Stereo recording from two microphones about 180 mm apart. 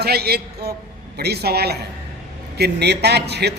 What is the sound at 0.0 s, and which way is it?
A man's voice, 60° right (ahead or behind).